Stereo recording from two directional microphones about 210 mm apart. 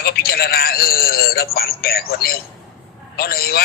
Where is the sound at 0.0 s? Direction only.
50° left (ahead or behind).